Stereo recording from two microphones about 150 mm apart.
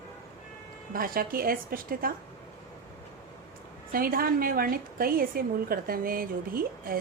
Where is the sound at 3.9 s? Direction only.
75° right (ahead or behind).